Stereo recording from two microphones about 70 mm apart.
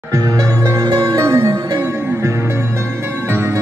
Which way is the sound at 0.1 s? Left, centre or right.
Right.